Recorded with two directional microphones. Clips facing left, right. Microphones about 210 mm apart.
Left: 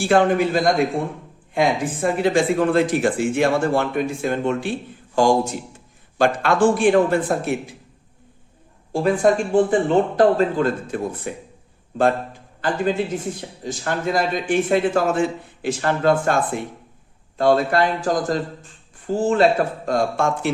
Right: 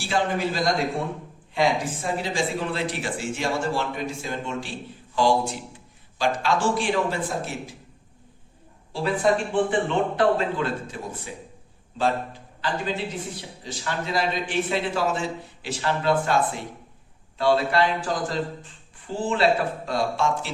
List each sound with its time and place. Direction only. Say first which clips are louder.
0.0 s speech: left 8 dB; 55° left (ahead or behind)
5.1 s speech: left 4 dB; 45° left (ahead or behind)
6.1 s speech: left 6 dB; 55° left (ahead or behind)
8.9 s speech: left 5 dB; 45° left (ahead or behind)
12.6 s speech: left 7 dB; 50° left (ahead or behind)